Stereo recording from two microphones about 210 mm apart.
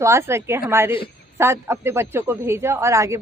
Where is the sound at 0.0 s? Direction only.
15° right (ahead or behind).